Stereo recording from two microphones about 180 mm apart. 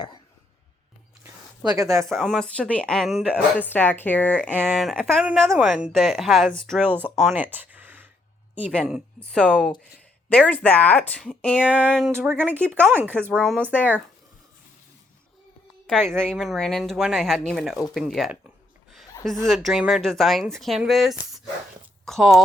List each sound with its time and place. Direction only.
1.2 s a sound: 20° right (ahead or behind)
2.0 s speech: centre (ahead or behind)
3.6 s speech: 10° left (ahead or behind)
4.4 s speech: 10° right (ahead or behind)
6.8 s speech: 10° right (ahead or behind)
7.2 s a sound: 5° right (ahead or behind)
8.7 s speech: 5° left (ahead or behind)
13.3 s speech: 5° left (ahead or behind)
13.6 s speech: 10° right (ahead or behind)
15.9 s speech: 5° left (ahead or behind)